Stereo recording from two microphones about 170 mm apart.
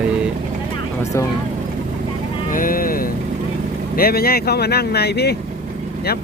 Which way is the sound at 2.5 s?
55° left (ahead or behind).